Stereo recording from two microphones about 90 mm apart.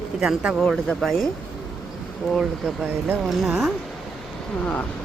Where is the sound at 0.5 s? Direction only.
5° left (ahead or behind).